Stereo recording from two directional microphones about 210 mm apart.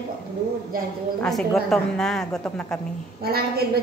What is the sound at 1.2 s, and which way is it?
Speech, centre (ahead or behind).